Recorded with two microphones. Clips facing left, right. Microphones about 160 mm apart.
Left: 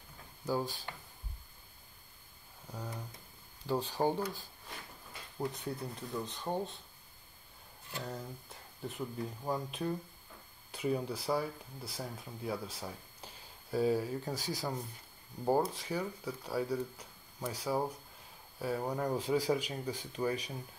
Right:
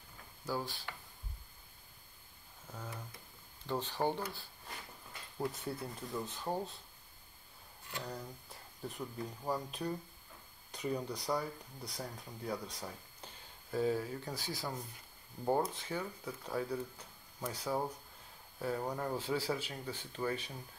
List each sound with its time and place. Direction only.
0.5 s speech: 15° left (ahead or behind)
3.6 s speech: 10° left (ahead or behind)
5.5 s speech: centre (ahead or behind)
8.0 s speech: 5° left (ahead or behind)
14.3 s speech: 40° left (ahead or behind)
15.4 s speech: 10° left (ahead or behind)